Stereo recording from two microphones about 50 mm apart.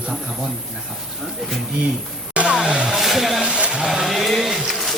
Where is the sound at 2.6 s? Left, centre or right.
Centre.